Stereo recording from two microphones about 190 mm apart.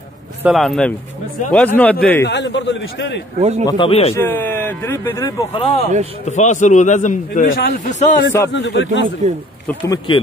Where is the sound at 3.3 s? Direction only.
35° right (ahead or behind).